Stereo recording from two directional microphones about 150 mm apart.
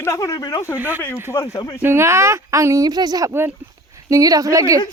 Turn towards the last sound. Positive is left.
turn(degrees=-20)  # may be behind; listen again after turning